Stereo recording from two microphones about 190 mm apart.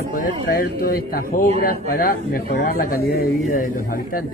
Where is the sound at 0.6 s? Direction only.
50° left (ahead or behind).